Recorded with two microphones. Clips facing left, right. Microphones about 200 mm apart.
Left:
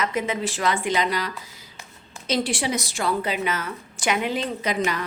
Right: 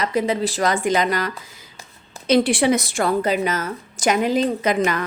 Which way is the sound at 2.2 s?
60° right (ahead or behind).